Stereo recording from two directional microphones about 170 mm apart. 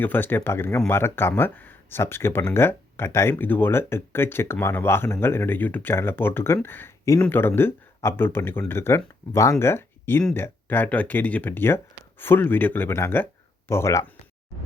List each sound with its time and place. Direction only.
0.0 s speech: 10° left (ahead or behind)